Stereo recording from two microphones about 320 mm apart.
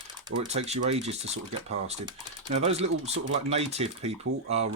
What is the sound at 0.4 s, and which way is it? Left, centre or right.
Speech, centre.